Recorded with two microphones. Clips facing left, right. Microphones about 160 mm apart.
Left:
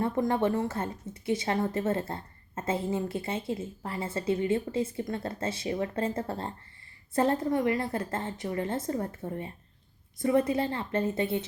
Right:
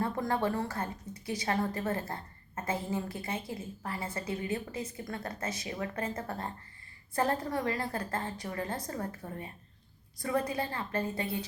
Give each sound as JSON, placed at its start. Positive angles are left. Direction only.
{"t": 0.0, "sound": "a woman's voice", "side_deg": 20}